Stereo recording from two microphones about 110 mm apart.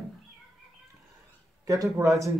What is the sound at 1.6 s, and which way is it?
Speech, 30° right (ahead or behind).